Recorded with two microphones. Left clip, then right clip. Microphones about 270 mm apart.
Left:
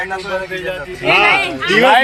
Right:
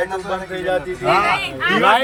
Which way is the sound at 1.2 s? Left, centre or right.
Left.